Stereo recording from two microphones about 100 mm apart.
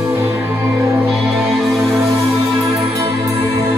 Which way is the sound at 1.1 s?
Centre (ahead or behind).